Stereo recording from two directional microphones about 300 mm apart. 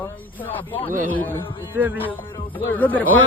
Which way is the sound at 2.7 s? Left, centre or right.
Centre.